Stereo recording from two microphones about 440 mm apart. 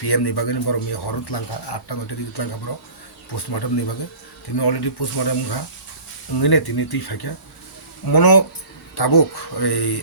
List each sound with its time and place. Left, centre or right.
0.0 s a man's voice: left